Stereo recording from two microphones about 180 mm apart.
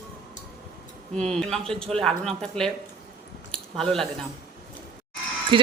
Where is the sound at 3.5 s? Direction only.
5° left (ahead or behind).